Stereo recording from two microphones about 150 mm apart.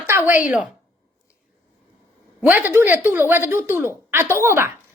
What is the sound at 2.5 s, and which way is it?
A woman's voice, 15° right (ahead or behind).